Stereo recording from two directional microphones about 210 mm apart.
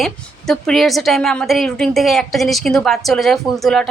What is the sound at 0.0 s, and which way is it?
A woman's voice, centre (ahead or behind).